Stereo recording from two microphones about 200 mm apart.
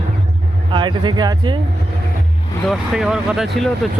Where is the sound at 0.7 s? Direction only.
25° right (ahead or behind).